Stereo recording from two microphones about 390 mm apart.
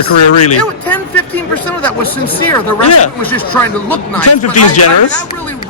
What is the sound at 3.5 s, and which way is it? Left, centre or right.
Speech, centre.